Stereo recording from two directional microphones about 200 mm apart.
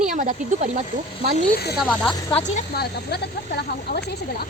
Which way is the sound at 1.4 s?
50° left (ahead or behind).